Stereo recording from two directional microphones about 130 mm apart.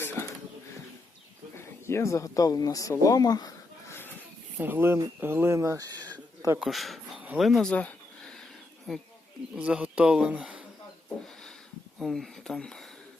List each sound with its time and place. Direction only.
0.0 s a sound: 15° left (ahead or behind)
1.5 s speech: 20° left (ahead or behind)
4.5 s speech: 15° right (ahead or behind)
6.6 s speech: centre (ahead or behind)
7.2 s a sound: 10° right (ahead or behind)
7.4 s speech: centre (ahead or behind)
7.7 s a sound: 10° left (ahead or behind)
8.9 s speech: centre (ahead or behind)
11.9 s speech: centre (ahead or behind)